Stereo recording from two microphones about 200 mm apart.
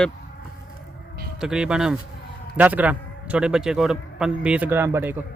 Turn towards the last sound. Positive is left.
turn(degrees=-10)  # may be behind; listen again after turning